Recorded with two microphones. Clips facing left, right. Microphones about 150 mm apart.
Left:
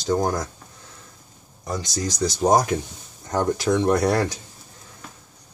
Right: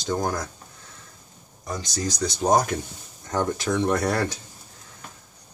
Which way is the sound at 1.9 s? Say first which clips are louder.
Left 2 dB; centre (ahead or behind).